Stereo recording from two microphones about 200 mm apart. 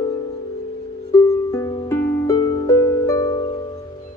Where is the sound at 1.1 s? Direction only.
15° left (ahead or behind).